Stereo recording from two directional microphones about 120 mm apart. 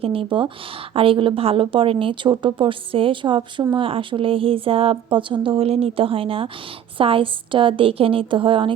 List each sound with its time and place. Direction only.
0.0 s speech: 50° right (ahead or behind)